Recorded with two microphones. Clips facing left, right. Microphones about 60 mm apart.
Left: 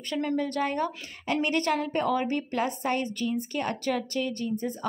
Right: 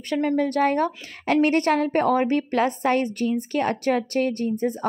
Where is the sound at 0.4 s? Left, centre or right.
Right.